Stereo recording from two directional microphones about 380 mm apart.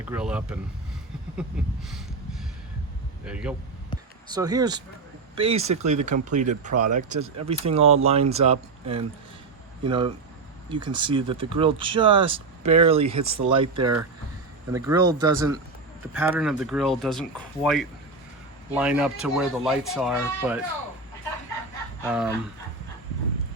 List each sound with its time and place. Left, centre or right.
0.0 s speech: centre
3.2 s speech: centre
22.0 s speech: centre